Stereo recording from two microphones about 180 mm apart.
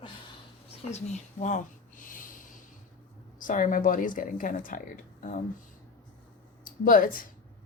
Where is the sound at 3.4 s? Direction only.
50° left (ahead or behind).